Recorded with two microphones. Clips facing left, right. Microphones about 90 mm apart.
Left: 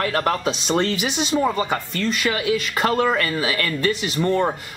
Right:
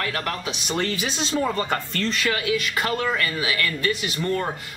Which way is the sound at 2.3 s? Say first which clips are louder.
Left 3 dB; 25° left (ahead or behind).